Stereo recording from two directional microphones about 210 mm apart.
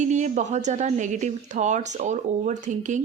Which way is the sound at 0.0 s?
35° right (ahead or behind).